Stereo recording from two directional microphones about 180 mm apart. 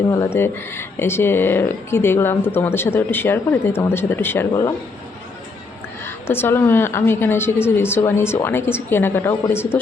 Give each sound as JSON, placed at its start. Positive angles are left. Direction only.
{"t": 0.1, "sound": "speech", "side_deg": 15}
{"t": 6.1, "sound": "speech", "side_deg": 10}